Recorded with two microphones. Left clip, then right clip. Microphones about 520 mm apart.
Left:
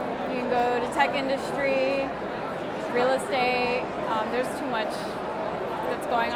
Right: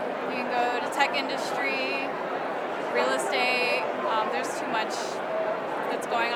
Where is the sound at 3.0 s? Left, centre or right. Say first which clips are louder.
Left 2 dB; left.